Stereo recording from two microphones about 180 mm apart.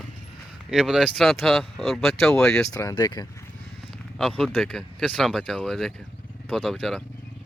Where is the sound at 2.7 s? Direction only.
20° left (ahead or behind).